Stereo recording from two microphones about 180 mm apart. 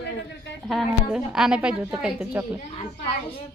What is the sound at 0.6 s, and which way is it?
A woman's voice, centre (ahead or behind).